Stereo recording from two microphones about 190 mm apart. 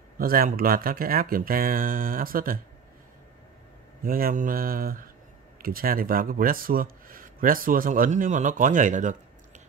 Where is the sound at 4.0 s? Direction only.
50° right (ahead or behind).